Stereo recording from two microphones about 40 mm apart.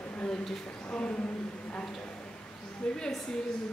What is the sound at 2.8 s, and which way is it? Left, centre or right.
Speech, centre.